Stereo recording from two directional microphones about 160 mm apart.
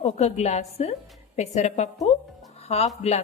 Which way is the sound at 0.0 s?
40° left (ahead or behind).